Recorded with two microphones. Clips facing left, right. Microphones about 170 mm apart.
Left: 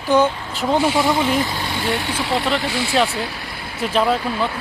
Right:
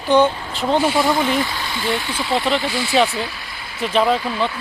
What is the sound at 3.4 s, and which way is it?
Vehicle, 60° left (ahead or behind).